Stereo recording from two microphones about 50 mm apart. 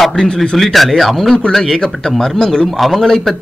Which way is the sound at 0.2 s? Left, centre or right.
Centre.